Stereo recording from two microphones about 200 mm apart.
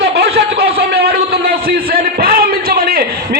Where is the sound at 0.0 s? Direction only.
55° right (ahead or behind).